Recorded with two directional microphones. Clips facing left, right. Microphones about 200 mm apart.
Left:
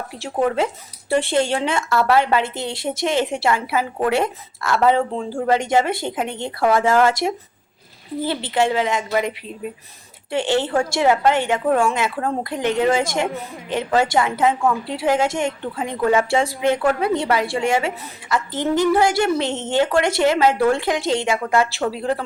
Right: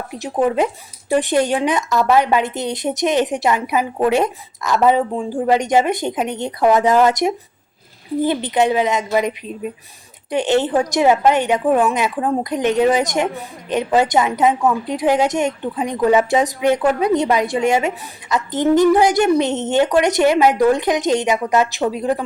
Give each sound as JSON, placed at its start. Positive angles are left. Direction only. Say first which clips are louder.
{"t": 0.2, "sound": "a woman's voice", "louder": "right 3 dB", "side_deg": -15}